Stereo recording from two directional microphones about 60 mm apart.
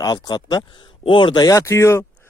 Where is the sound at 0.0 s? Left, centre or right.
Left.